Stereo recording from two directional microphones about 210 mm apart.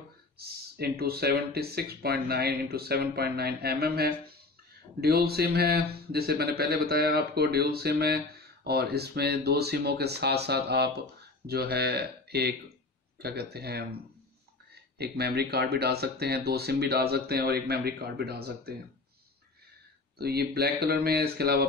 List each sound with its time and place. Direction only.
0.4 s speech: 50° right (ahead or behind)
20.2 s speech: 50° right (ahead or behind)